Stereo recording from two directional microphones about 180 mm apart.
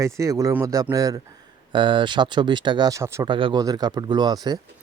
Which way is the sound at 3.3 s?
25° right (ahead or behind).